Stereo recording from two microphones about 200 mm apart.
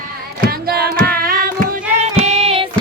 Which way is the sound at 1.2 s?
45° right (ahead or behind).